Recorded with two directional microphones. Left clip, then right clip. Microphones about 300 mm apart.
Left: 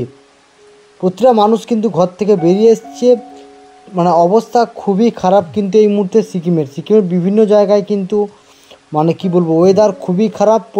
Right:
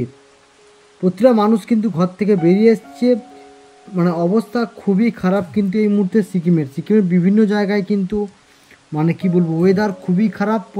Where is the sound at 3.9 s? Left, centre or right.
Left.